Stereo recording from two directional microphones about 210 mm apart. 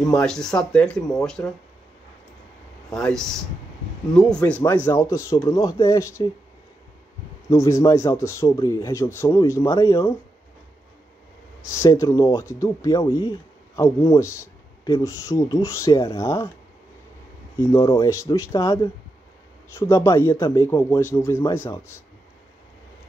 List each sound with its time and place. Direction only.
0.0 s speech: 5° left (ahead or behind)
2.9 s speech: centre (ahead or behind)
7.4 s speech: 15° left (ahead or behind)
11.8 s speech: 15° left (ahead or behind)
17.6 s speech: 15° left (ahead or behind)